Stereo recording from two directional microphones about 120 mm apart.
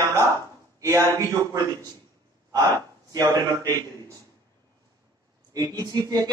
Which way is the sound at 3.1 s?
30° right (ahead or behind).